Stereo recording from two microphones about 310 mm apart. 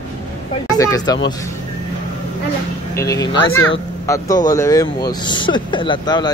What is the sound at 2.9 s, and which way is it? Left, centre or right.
Speech, centre.